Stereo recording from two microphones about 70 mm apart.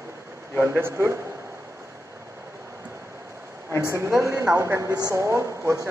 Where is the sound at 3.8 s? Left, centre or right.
Right.